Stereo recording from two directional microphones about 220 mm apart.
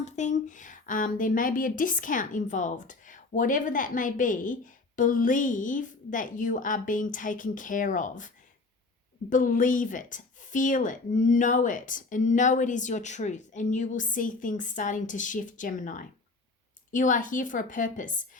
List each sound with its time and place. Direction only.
0.0 s speech: 35° left (ahead or behind)
9.3 s speech: 35° left (ahead or behind)